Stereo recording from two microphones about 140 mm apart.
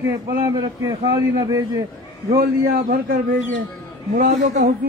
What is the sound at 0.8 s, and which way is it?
A man's voice, 25° right (ahead or behind).